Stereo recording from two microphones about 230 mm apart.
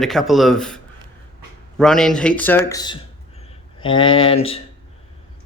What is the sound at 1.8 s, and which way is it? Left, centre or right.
A man's voice, centre.